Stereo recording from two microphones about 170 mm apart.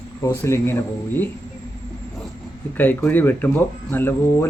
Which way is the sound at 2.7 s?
10° left (ahead or behind).